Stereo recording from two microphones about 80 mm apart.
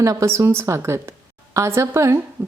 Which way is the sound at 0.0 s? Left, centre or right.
Right.